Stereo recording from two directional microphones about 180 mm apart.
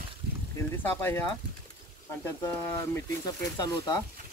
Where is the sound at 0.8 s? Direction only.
10° left (ahead or behind).